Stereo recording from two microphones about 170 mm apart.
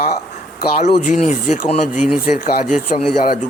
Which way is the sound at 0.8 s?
50° left (ahead or behind).